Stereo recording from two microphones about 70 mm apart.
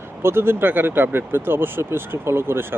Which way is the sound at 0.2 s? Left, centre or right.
Right.